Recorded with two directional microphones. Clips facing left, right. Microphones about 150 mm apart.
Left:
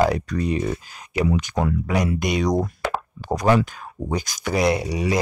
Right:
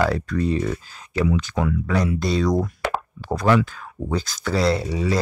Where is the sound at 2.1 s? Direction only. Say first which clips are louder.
Even; 15° left (ahead or behind).